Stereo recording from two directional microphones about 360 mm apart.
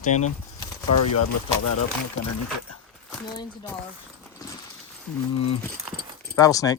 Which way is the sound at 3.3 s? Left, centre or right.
Centre.